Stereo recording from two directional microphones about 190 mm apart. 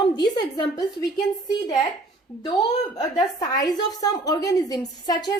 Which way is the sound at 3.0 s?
20° left (ahead or behind).